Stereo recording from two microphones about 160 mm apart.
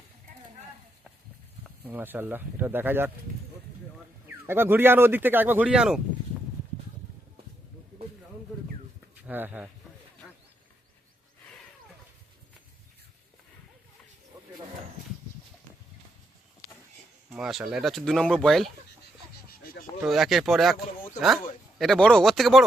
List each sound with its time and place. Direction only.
1.8 s speech: 10° right (ahead or behind)
4.4 s speech: 15° right (ahead or behind)
9.2 s speech: 10° right (ahead or behind)
17.2 s speech: centre (ahead or behind)
19.5 s goat: 70° left (ahead or behind)
20.0 s speech: centre (ahead or behind)
21.8 s speech: 5° left (ahead or behind)